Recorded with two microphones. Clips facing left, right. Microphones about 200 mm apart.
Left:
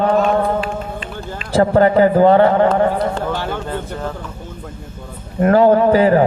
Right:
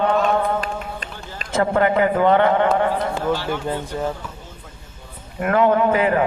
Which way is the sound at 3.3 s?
55° left (ahead or behind).